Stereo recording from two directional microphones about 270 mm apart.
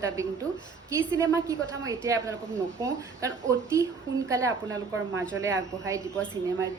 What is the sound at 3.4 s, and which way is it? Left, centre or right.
Speech, centre.